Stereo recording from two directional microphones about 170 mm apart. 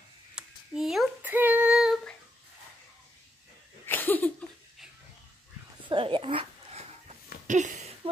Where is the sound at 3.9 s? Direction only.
10° left (ahead or behind).